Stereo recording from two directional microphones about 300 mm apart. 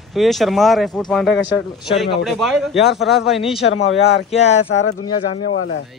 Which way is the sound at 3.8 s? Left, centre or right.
Left.